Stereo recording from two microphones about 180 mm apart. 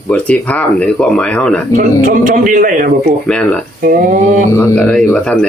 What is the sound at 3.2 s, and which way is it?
Speech, 5° left (ahead or behind).